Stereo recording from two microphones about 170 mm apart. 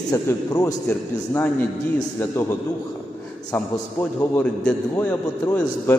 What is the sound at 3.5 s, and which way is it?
Speech, 10° left (ahead or behind).